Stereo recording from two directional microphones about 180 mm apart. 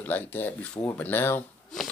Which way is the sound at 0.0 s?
10° left (ahead or behind).